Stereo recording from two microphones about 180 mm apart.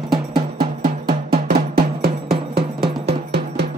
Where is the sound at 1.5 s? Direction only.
60° right (ahead or behind).